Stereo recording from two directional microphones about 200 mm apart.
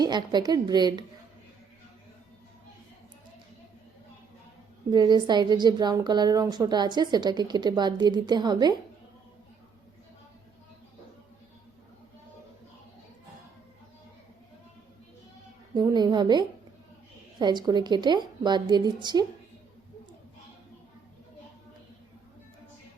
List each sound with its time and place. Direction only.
0.0 s a woman's voice: 20° right (ahead or behind)
4.9 s a woman's voice: 20° right (ahead or behind)
15.7 s a woman's voice: 20° right (ahead or behind)